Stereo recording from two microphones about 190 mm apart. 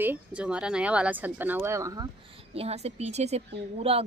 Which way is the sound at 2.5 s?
35° right (ahead or behind).